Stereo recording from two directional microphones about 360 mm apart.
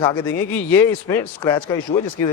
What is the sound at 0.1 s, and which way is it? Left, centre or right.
Speech, centre.